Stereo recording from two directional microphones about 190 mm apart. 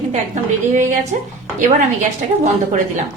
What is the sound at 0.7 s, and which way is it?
Speech, 40° right (ahead or behind).